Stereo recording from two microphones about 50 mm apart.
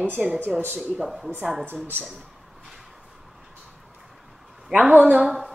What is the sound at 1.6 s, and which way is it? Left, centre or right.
Speech, right.